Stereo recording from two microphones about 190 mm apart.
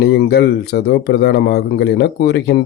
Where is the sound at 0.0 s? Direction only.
60° left (ahead or behind).